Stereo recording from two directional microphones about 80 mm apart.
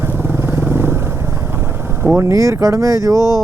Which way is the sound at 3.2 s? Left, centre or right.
Left.